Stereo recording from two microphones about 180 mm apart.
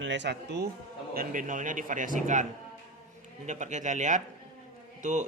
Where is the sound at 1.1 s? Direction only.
50° right (ahead or behind).